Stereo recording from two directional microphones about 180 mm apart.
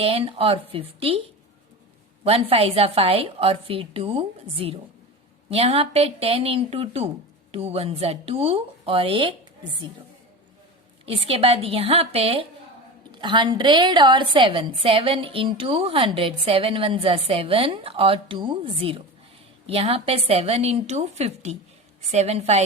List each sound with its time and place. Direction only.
0.0 s a woman's voice: 30° right (ahead or behind)
2.2 s a woman's voice: 35° right (ahead or behind)
11.0 s a woman's voice: 30° right (ahead or behind)